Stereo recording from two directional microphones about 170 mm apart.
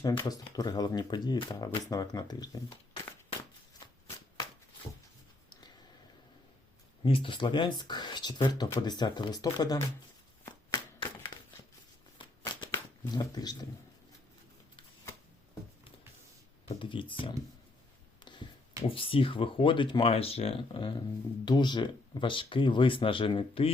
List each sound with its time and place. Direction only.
0.0 s speech: 25° left (ahead or behind)
7.0 s speech: 30° left (ahead or behind)
12.2 s shuffling cards: 25° left (ahead or behind)
13.1 s speech: 25° left (ahead or behind)
16.6 s speech: 30° left (ahead or behind)
18.3 s a sound: 25° left (ahead or behind)
18.9 s speech: 30° left (ahead or behind)